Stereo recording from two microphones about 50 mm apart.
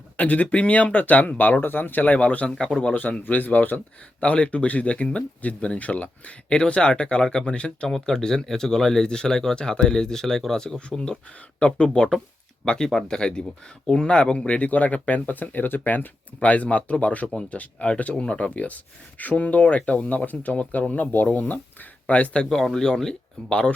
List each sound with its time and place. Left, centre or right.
0.2 s speech: left
2.5 s speech: centre
2.9 s speech: left
4.2 s speech: left
10.8 s speech: left
22.4 s speech: centre